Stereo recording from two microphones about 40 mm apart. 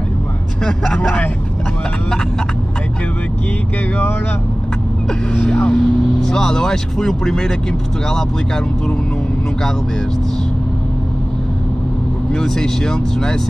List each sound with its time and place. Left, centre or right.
0.7 s speech: centre
5.3 s speech: left
5.8 s speech: centre
12.3 s speech: centre